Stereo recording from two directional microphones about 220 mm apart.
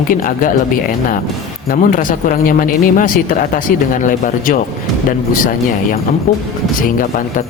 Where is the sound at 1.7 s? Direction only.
40° left (ahead or behind).